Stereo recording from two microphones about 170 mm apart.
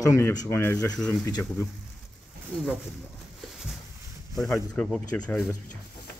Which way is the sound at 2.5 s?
Centre (ahead or behind).